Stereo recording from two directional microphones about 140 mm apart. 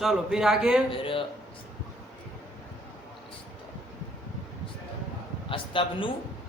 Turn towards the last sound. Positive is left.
turn(degrees=40)  # may be behind; listen again after turning